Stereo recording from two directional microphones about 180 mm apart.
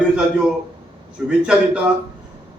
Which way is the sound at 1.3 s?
5° right (ahead or behind).